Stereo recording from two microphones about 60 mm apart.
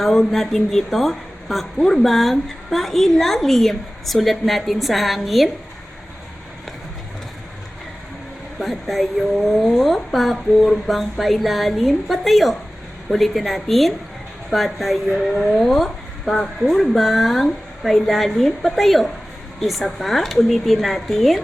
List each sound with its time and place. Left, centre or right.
0.0 s a woman's voice: centre
8.5 s a woman's voice: centre